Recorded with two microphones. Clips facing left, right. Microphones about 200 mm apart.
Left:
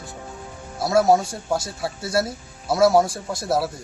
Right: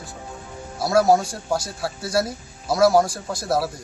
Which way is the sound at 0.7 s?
Centre (ahead or behind).